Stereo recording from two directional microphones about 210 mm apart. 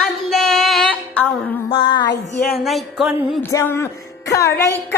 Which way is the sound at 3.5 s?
15° left (ahead or behind).